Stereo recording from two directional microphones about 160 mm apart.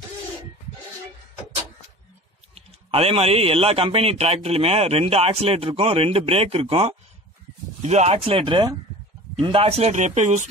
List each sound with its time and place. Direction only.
2.5 s speech: 40° right (ahead or behind)